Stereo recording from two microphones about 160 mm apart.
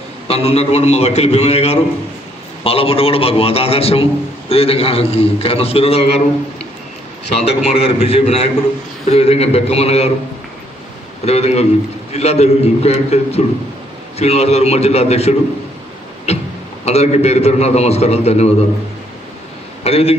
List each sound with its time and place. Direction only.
0.3 s a man's voice: 40° left (ahead or behind)
7.4 s a man's voice: 40° left (ahead or behind)
11.2 s a man's voice: 40° left (ahead or behind)
16.3 s music: 40° left (ahead or behind)
16.8 s a man's voice: 40° left (ahead or behind)
19.8 s a man's voice: 40° left (ahead or behind)